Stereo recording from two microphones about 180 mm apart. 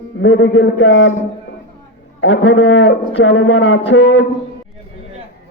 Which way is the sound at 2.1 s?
90° left.